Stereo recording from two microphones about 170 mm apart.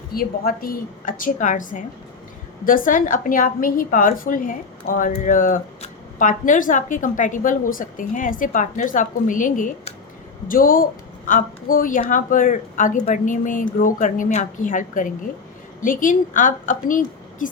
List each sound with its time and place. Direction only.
0.1 s a woman's voice: 60° left (ahead or behind)